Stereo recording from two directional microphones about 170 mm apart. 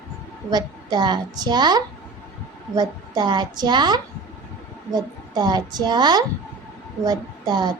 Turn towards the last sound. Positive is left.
turn(degrees=-25)  # may be behind; listen again after turning